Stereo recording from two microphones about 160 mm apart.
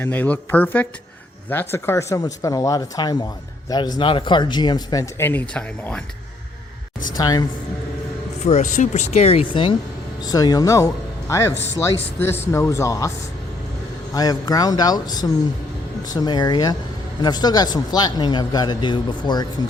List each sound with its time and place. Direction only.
0.0 s speech: 10° left (ahead or behind)
7.2 s speech: 25° left (ahead or behind)
8.4 s speech: 45° left (ahead or behind); by 13.1 s 20° left (ahead or behind)
14.1 s speech: 25° left (ahead or behind)